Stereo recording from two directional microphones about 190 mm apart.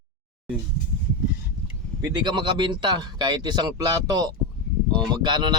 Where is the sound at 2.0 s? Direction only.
20° right (ahead or behind).